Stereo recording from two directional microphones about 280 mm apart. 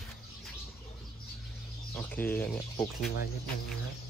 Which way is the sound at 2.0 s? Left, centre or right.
Centre.